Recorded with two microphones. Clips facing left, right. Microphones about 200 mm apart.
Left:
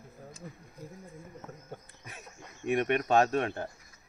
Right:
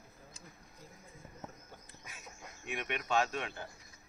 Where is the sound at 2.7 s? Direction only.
50° left (ahead or behind).